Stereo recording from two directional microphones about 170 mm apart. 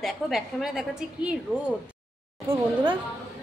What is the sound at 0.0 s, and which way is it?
A woman's voice, centre (ahead or behind).